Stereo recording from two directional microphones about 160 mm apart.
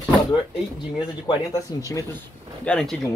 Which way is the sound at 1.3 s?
20° left (ahead or behind).